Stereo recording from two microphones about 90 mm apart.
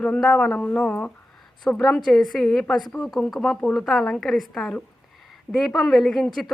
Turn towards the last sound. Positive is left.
turn(degrees=0)  # may be behind; listen again after turning